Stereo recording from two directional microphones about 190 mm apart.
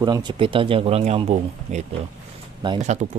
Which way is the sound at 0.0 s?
20° right (ahead or behind).